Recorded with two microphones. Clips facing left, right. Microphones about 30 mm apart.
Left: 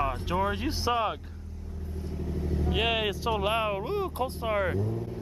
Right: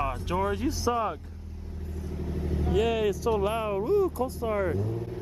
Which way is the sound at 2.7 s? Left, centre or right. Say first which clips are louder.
Right 3 dB; left.